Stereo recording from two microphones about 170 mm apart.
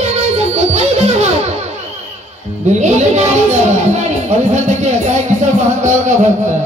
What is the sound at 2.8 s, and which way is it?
A man's voice, 40° right (ahead or behind).